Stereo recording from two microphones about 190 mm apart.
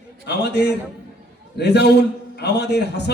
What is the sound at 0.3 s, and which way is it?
A man's voice, 60° left (ahead or behind).